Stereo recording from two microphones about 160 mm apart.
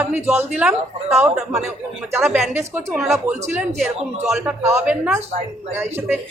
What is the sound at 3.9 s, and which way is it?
Speech, 45° right (ahead or behind).